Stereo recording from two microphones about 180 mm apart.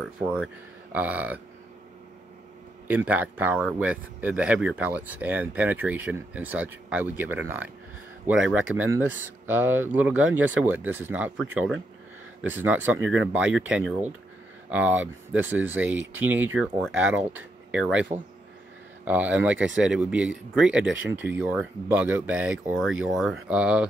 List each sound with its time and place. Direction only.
0.2 s speech: 5° right (ahead or behind)
3.1 s speech: 10° right (ahead or behind)
13.0 s speech: 90° right
13.3 s speech: 5° right (ahead or behind)
19.0 s speech: 10° right (ahead or behind)